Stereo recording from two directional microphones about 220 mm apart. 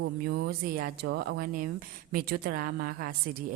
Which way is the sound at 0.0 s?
45° right (ahead or behind).